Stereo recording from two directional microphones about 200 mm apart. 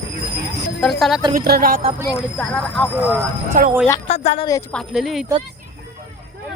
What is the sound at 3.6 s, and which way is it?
Speech, 45° right (ahead or behind).